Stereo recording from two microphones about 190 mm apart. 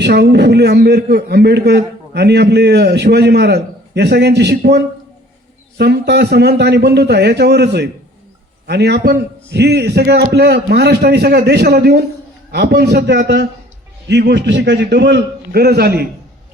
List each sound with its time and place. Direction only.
0.0 s a man's voice: 60° right (ahead or behind)